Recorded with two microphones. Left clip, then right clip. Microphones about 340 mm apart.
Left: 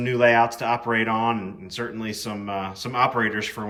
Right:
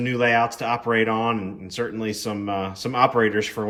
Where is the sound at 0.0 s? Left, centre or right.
Centre.